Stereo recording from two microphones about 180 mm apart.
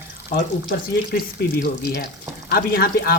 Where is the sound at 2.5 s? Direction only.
55° left (ahead or behind).